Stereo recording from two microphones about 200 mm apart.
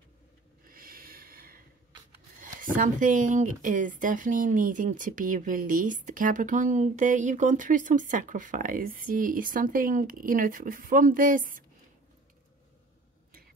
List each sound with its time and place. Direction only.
0.7 s snort: 45° right (ahead or behind)
2.4 s speech: 45° right (ahead or behind)